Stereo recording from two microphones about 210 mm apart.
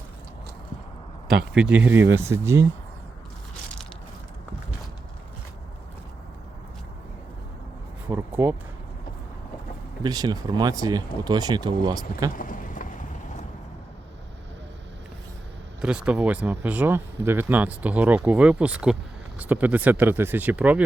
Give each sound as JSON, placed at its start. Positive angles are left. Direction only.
{"t": 1.5, "sound": "speech", "side_deg": -5}
{"t": 8.0, "sound": "a sound", "side_deg": -10}
{"t": 10.0, "sound": "speech", "side_deg": -20}
{"t": 12.4, "sound": "run", "side_deg": 40}
{"t": 15.8, "sound": "speech", "side_deg": -5}